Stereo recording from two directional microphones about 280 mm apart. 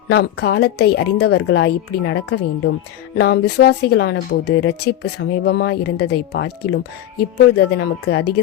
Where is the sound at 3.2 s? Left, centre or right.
Left.